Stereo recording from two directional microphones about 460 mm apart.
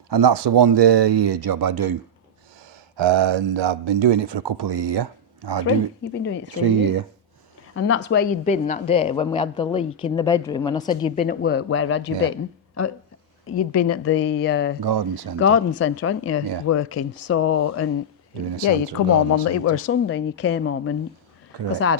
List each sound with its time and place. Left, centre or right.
0.1 s speech: right
3.0 s speech: right
6.6 s speech: right
7.7 s a woman's voice: left
13.6 s speech: left
14.8 s speech: right
15.4 s speech: left